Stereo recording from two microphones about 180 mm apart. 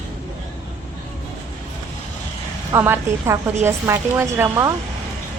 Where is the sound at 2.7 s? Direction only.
15° right (ahead or behind).